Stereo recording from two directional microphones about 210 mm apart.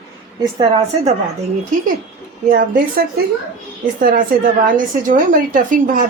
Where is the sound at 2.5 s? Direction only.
45° right (ahead or behind).